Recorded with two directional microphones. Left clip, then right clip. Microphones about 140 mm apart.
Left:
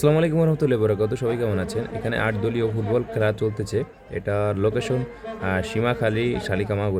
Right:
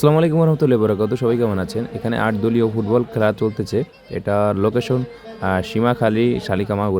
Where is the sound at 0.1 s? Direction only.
20° right (ahead or behind).